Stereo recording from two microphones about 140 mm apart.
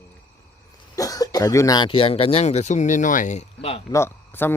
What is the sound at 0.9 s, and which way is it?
Speech, 25° left (ahead or behind).